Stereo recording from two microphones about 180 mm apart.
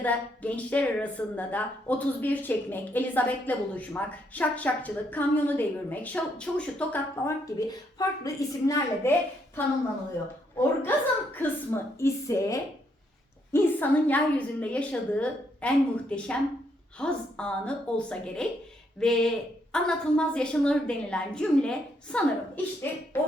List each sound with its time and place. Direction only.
0.0 s a woman's voice: 10° left (ahead or behind)
7.7 s a woman's voice: 20° left (ahead or behind)
10.8 s a woman's voice: 10° left (ahead or behind)